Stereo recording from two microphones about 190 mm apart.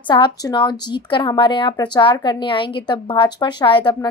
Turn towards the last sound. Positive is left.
turn(degrees=25)  # may be behind; listen again after turning